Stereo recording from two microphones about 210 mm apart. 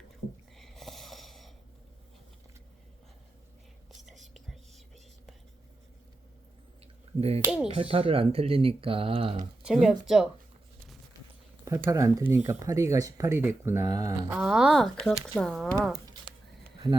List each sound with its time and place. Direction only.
0.5 s a sound: centre (ahead or behind)
7.2 s speech: 30° right (ahead or behind)
7.4 s speech: 5° right (ahead or behind)
7.7 s speech: 25° right (ahead or behind)
9.6 s speech: 5° right (ahead or behind)
11.9 s speech: 15° right (ahead or behind); by 15.7 s centre (ahead or behind)
16.8 s speech: 15° right (ahead or behind)